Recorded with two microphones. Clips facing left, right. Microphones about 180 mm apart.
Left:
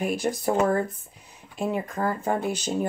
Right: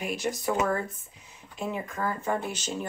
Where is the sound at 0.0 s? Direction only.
55° left (ahead or behind).